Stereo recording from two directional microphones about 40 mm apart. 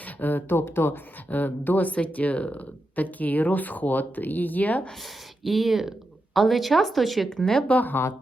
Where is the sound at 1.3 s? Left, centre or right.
Left.